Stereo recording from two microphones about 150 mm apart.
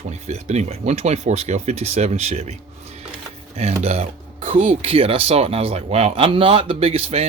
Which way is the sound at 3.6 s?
45° right (ahead or behind).